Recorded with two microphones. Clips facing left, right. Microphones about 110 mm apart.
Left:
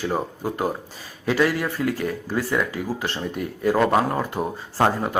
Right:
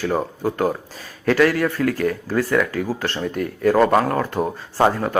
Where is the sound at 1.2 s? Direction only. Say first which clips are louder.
Right 4 dB; 15° left (ahead or behind).